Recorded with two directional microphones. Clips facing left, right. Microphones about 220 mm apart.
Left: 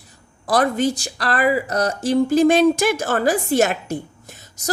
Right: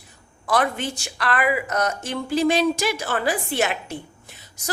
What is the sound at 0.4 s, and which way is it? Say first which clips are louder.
A woman's voice: left 5 dB; 40° left (ahead or behind).